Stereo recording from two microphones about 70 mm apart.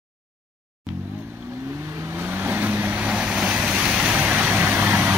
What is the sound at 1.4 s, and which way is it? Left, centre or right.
Vehicle, right.